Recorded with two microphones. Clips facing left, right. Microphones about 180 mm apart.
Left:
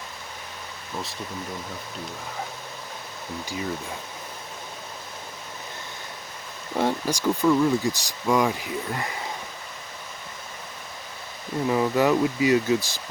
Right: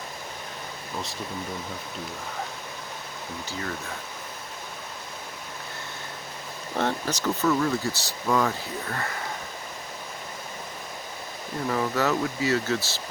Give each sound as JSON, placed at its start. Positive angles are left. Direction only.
{"t": 3.4, "sound": "speech", "side_deg": 10}
{"t": 6.7, "sound": "speech", "side_deg": 10}
{"t": 11.7, "sound": "speech", "side_deg": 15}